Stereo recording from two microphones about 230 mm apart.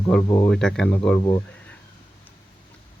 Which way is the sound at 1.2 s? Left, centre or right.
Centre.